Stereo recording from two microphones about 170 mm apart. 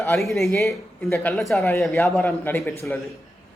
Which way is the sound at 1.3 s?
Centre (ahead or behind).